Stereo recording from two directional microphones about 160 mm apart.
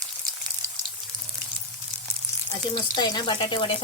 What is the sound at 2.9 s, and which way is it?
Speech, 25° left (ahead or behind).